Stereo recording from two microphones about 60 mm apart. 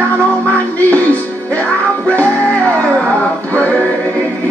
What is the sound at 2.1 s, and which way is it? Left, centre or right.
Music, left.